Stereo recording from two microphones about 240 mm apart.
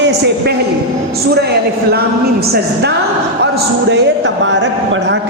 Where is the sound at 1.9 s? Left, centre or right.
Right.